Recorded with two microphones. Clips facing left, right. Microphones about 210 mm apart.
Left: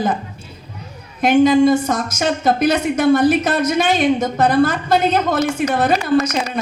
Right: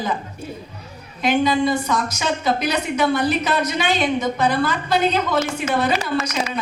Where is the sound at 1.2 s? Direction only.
45° left (ahead or behind).